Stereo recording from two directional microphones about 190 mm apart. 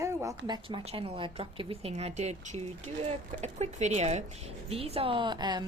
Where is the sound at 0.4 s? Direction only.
20° right (ahead or behind).